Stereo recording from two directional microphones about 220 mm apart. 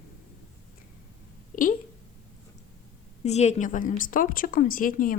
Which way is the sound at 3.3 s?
30° left (ahead or behind).